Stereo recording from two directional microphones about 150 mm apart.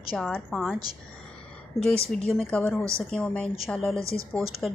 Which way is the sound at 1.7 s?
20° left (ahead or behind).